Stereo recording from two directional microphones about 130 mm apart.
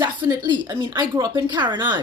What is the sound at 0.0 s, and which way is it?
Speech, 35° right (ahead or behind).